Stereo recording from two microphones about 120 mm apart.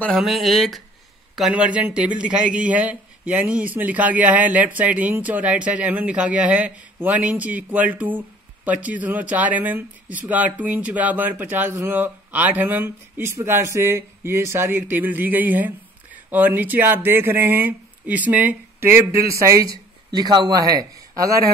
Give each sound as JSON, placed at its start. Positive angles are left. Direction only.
{"t": 0.2, "sound": "speech", "side_deg": 0}
{"t": 1.5, "sound": "speech", "side_deg": -10}
{"t": 19.2, "sound": "speech", "side_deg": -25}